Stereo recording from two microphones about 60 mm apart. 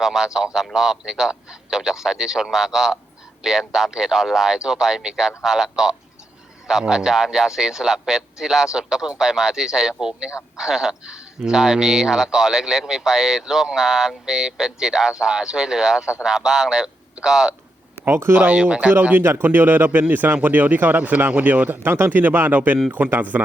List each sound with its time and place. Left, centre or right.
0.0 s a man's voice: centre
18.0 s speech: right
18.3 s speech: right
19.1 s a man's voice: right